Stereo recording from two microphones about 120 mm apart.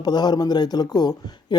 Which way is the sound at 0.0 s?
35° left (ahead or behind).